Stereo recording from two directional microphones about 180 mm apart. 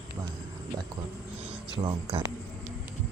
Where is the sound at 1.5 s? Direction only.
30° right (ahead or behind).